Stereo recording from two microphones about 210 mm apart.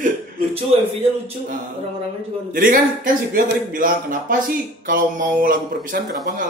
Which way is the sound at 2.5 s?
40° right (ahead or behind).